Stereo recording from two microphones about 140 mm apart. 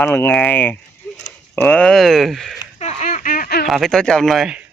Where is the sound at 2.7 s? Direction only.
55° left (ahead or behind); by 3.5 s 85° left.